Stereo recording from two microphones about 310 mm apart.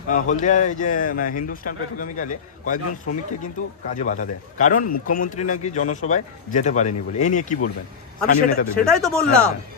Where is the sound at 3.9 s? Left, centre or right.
Left.